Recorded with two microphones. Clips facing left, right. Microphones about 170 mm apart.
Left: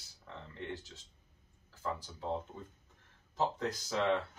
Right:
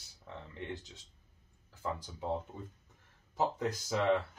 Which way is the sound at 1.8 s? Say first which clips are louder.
Right 1 dB; 15° right (ahead or behind).